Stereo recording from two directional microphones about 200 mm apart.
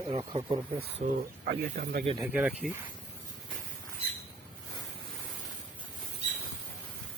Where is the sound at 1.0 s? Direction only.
50° right (ahead or behind).